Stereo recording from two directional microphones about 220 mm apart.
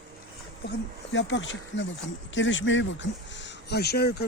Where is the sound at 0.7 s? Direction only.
55° left (ahead or behind).